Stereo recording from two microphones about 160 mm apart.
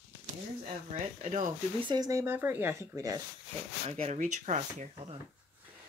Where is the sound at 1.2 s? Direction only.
50° right (ahead or behind).